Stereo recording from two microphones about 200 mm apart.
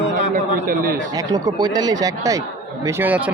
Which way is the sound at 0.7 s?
45° right (ahead or behind).